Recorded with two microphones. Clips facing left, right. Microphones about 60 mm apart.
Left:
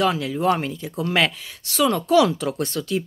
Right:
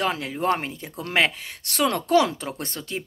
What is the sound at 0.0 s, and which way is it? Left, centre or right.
Speech, right.